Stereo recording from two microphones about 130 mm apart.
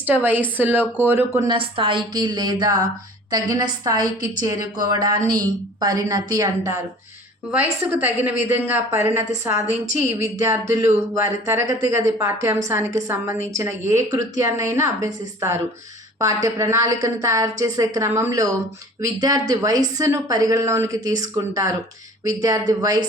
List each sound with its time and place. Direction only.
0.0 s a woman's voice: 15° right (ahead or behind)
1.5 s a woman's voice: 40° right (ahead or behind)
7.5 s a woman's voice: 15° right (ahead or behind); by 23.0 s 30° right (ahead or behind)